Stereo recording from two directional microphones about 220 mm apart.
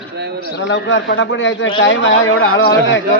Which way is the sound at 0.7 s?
55° left (ahead or behind).